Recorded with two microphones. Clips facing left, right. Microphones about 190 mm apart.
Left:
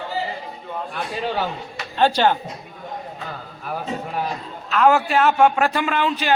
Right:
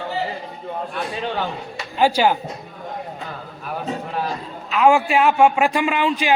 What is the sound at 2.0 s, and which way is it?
Speech, 10° right (ahead or behind).